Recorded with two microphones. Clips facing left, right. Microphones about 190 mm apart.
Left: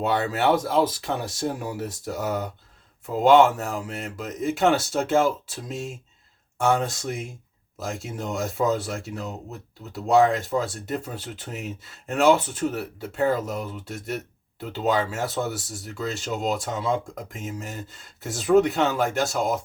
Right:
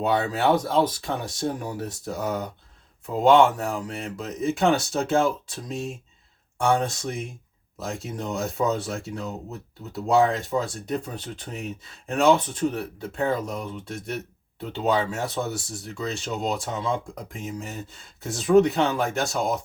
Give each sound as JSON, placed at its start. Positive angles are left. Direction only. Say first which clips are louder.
{"t": 0.0, "sound": "speech", "louder": "even", "side_deg": 0}
{"t": 6.6, "sound": "speech", "louder": "even", "side_deg": 5}